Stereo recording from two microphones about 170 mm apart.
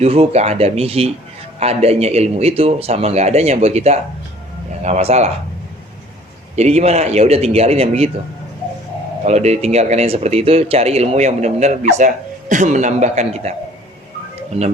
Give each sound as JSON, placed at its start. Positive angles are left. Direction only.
{"t": 0.0, "sound": "speech", "side_deg": -35}
{"t": 6.6, "sound": "speech", "side_deg": -40}
{"t": 9.2, "sound": "speech", "side_deg": -40}